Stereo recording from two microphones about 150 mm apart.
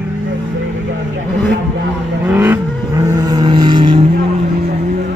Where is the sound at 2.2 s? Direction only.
15° right (ahead or behind).